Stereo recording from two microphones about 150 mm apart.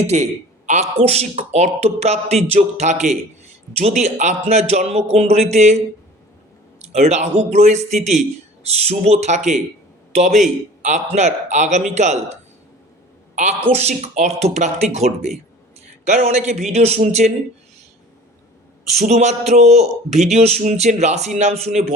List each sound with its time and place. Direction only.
0.0 s a man's voice: 45° right (ahead or behind)
6.8 s a man's voice: 50° right (ahead or behind)
19.0 s a man's voice: 50° right (ahead or behind)